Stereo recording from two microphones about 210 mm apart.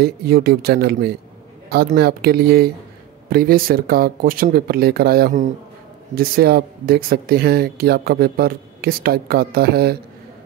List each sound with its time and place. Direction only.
0.0 s speech: 45° right (ahead or behind)